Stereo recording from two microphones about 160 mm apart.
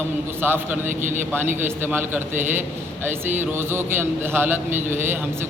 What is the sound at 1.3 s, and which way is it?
A man's voice, 15° right (ahead or behind).